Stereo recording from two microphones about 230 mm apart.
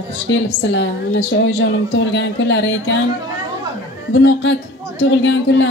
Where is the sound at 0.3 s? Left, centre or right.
Left.